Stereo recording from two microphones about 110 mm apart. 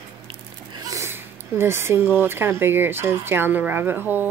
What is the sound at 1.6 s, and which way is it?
Speech, 20° right (ahead or behind).